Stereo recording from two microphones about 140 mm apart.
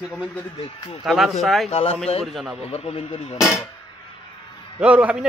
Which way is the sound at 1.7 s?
45° left (ahead or behind).